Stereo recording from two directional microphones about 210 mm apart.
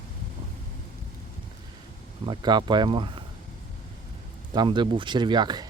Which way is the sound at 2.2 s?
20° right (ahead or behind).